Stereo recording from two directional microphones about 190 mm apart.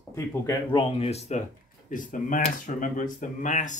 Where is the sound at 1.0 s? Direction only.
35° left (ahead or behind).